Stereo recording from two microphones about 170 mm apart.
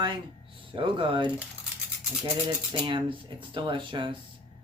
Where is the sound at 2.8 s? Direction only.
30° right (ahead or behind).